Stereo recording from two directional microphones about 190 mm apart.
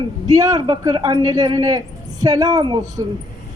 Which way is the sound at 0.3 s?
20° right (ahead or behind).